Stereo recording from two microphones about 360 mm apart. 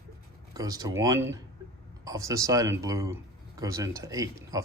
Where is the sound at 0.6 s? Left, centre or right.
Centre.